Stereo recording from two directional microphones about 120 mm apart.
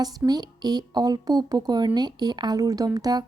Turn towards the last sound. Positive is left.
turn(degrees=-30)  # may be behind; listen again after turning